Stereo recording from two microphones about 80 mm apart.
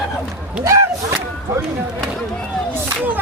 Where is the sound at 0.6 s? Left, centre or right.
Right.